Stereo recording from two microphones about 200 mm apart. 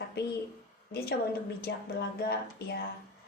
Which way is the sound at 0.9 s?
50° left (ahead or behind).